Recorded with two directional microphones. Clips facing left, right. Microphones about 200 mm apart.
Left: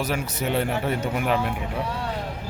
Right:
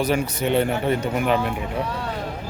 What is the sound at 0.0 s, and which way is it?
Speech, 5° left (ahead or behind).